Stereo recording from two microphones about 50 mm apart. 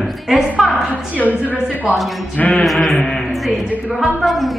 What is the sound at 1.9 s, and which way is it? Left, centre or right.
Speech, centre.